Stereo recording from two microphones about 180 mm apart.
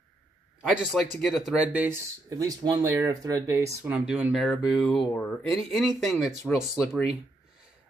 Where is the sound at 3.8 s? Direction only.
5° right (ahead or behind).